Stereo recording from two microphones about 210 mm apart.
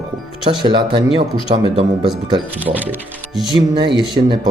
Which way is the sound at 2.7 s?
35° right (ahead or behind).